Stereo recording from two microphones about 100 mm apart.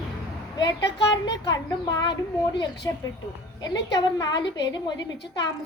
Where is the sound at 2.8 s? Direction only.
35° left (ahead or behind).